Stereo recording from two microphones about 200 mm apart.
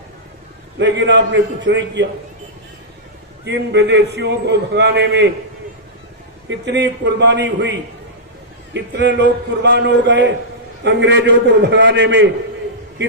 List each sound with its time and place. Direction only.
0.8 s a man's voice: 60° right (ahead or behind)
3.4 s a man's voice: 60° right (ahead or behind)
6.5 s a man's voice: 60° right (ahead or behind)